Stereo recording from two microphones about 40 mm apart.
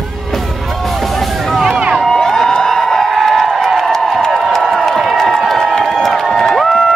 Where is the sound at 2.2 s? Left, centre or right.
Centre.